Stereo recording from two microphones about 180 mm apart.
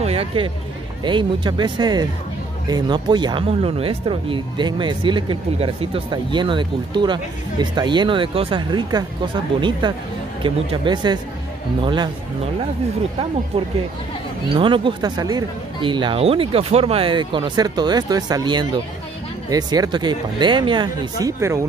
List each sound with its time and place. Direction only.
0.0 s a sound: 35° right (ahead or behind)
1.0 s speech: 25° right (ahead or behind)
14.5 s speech: 30° right (ahead or behind)